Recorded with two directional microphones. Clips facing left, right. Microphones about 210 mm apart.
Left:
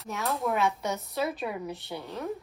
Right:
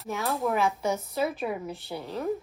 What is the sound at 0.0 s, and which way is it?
Speech, centre (ahead or behind).